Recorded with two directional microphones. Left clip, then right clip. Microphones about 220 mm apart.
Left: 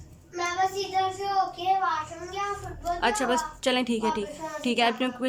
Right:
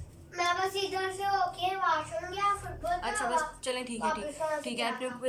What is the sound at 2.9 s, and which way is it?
A woman's voice, 45° left (ahead or behind).